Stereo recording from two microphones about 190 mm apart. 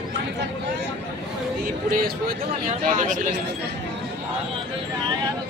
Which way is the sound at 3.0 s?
45° right (ahead or behind).